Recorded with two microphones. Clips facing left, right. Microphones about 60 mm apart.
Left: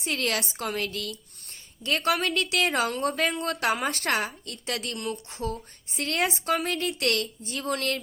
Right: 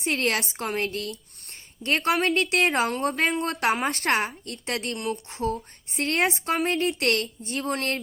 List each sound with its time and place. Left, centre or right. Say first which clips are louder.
0.0 s a woman's voice: right 3 dB; right